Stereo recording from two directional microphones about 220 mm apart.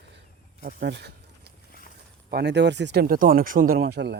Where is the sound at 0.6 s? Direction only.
50° right (ahead or behind).